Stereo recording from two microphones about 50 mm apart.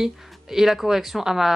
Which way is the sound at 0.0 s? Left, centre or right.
Centre.